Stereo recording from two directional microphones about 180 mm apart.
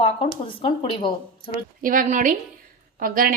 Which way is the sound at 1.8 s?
50° right (ahead or behind).